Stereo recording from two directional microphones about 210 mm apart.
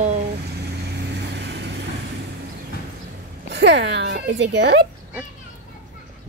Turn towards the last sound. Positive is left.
turn(degrees=-55)  # may be behind; listen again after turning